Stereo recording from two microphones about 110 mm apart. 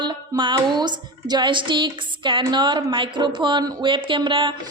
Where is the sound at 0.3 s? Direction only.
45° right (ahead or behind).